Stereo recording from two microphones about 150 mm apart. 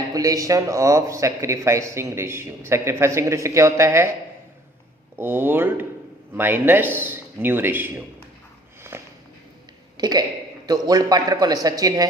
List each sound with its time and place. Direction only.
0.1 s speech: 25° right (ahead or behind)
5.1 s a man's voice: 15° right (ahead or behind)
8.9 s a sound: 15° right (ahead or behind)
10.0 s speech: 25° right (ahead or behind)